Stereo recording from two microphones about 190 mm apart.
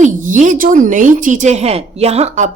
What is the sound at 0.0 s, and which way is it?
A woman's voice, 40° right (ahead or behind).